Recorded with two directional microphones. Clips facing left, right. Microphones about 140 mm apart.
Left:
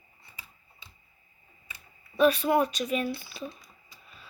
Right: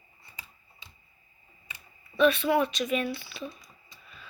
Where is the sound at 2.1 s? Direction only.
40° left (ahead or behind).